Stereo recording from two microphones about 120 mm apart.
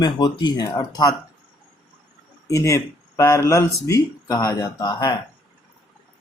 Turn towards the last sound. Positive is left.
turn(degrees=40)  # may be behind; listen again after turning